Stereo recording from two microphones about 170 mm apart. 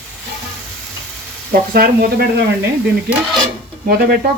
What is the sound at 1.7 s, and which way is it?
Speech, 60° right (ahead or behind).